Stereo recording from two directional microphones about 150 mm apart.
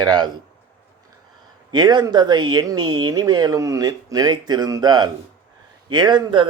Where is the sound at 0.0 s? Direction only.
30° right (ahead or behind).